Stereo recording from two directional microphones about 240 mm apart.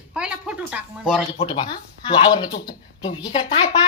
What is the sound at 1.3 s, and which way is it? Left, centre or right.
Speech, left.